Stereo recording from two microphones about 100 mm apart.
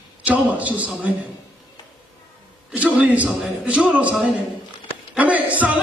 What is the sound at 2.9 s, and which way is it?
A man's voice, 10° right (ahead or behind).